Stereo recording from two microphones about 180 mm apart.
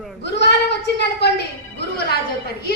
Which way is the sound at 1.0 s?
70° left (ahead or behind).